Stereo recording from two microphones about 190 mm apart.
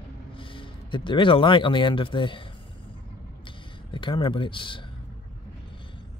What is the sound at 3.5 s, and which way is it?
Speech, 25° left (ahead or behind).